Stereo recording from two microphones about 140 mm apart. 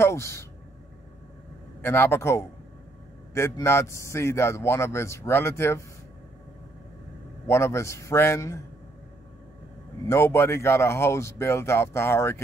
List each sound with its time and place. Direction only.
0.0 s speech: 20° left (ahead or behind)
1.8 s a man's voice: 15° left (ahead or behind)
7.4 s a man's voice: 20° left (ahead or behind)
10.0 s a man's voice: 20° left (ahead or behind)